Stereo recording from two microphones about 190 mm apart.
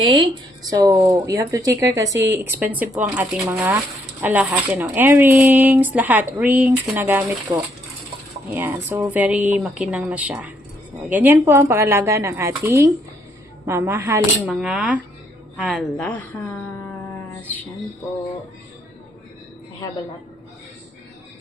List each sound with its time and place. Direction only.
0.0 s speech: 25° right (ahead or behind); by 7.3 s 10° right (ahead or behind)
7.5 s speech: 25° right (ahead or behind)
8.4 s speech: 10° right (ahead or behind)
14.4 s a woman's voice: centre (ahead or behind)
16.0 s a woman's voice: 5° left (ahead or behind)